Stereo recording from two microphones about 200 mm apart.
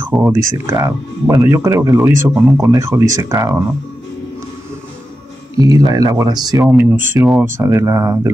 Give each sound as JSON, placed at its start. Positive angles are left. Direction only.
{"t": 0.0, "sound": "speech", "side_deg": -10}
{"t": 5.6, "sound": "speech", "side_deg": -20}
{"t": 6.6, "sound": "speech", "side_deg": -10}